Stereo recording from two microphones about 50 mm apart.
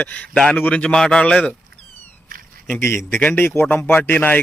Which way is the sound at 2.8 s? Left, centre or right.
Left.